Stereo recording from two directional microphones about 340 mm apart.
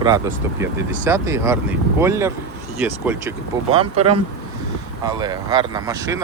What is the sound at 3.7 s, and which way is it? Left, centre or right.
Speech, centre.